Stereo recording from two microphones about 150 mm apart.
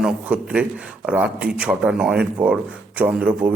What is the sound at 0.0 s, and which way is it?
Speech, 5° right (ahead or behind).